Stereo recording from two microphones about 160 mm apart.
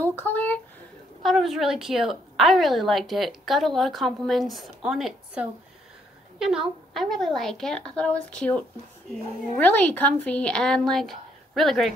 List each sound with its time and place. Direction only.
0.2 s speech: 10° left (ahead or behind)
1.2 s a woman's voice: centre (ahead or behind)